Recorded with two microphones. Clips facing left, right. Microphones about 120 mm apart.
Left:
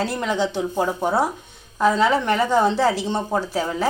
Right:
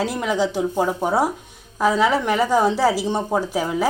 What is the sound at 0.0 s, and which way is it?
Speech, 5° right (ahead or behind).